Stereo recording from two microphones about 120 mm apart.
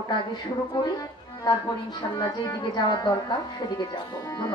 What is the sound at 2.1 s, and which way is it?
Speech, 35° left (ahead or behind).